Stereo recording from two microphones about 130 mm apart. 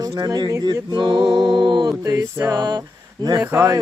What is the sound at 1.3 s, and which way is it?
Mantra, 35° right (ahead or behind).